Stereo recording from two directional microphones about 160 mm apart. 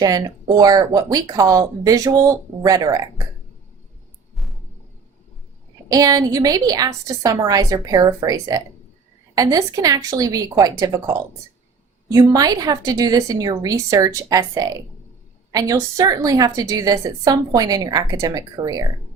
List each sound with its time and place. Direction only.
0.0 s a woman's voice: 25° right (ahead or behind)
5.9 s a woman's voice: 20° right (ahead or behind)